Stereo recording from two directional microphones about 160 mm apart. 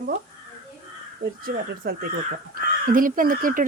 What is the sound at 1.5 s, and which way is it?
Speech, 70° right (ahead or behind).